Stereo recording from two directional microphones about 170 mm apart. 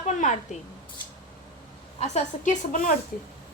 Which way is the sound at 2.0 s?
40° left (ahead or behind).